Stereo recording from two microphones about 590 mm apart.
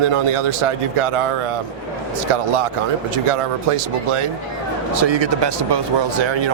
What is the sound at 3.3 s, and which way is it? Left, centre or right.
Speech, right.